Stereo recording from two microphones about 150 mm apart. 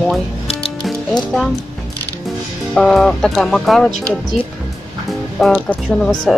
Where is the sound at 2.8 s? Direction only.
5° left (ahead or behind).